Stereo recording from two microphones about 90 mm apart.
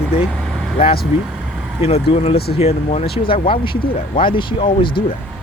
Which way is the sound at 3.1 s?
80° left.